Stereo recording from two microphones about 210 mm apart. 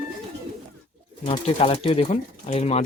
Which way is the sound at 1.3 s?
25° left (ahead or behind).